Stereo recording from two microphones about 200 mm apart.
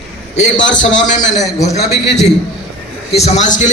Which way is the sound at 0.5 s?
20° left (ahead or behind).